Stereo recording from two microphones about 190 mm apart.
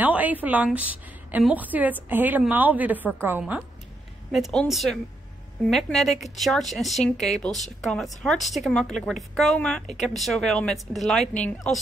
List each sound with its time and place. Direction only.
0.0 s a woman's voice: 10° right (ahead or behind)
4.3 s speech: centre (ahead or behind)